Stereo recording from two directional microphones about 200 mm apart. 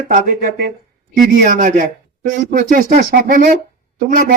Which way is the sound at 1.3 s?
45° right (ahead or behind).